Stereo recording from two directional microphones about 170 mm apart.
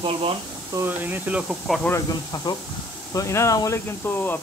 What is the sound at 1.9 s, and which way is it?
Speech, 20° left (ahead or behind).